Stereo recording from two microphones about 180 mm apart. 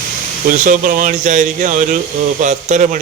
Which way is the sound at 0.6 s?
50° right (ahead or behind).